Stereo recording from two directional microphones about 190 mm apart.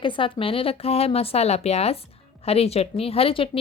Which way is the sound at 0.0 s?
25° left (ahead or behind).